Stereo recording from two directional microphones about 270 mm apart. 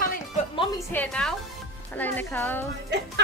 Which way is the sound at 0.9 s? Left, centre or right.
Centre.